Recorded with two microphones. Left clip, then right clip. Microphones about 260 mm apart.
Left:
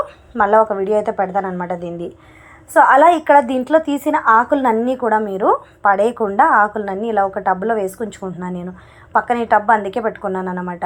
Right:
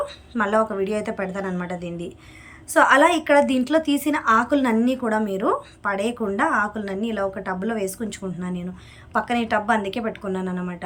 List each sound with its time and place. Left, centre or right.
0.0 s a woman's voice: centre